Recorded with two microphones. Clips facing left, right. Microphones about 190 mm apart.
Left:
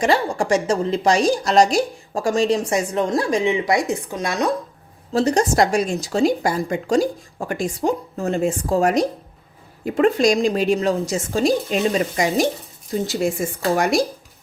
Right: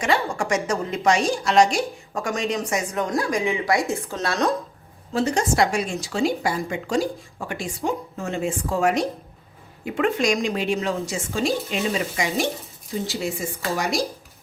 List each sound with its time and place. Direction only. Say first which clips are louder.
0.0 s a woman's voice: left 4 dB; 35° left (ahead or behind); by 4.5 s 15° left (ahead or behind)
5.1 s a woman's voice: left 4 dB; 40° left (ahead or behind); by 14.0 s 55° left (ahead or behind)